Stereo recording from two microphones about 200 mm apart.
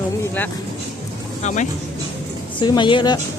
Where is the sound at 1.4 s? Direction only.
40° left (ahead or behind).